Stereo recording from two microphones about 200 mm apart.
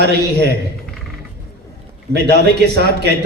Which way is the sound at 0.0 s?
55° right (ahead or behind).